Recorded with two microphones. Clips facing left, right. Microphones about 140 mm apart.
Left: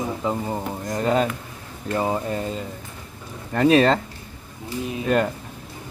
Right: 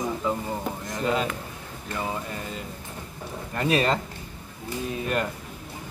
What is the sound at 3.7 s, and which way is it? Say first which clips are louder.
Speech: left 6 dB; 35° left (ahead or behind).